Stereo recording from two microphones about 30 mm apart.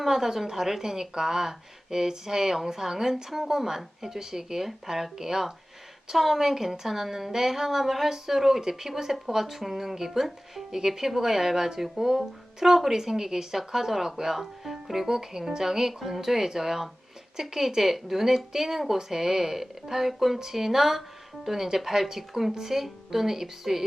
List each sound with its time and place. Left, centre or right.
0.0 s speech: centre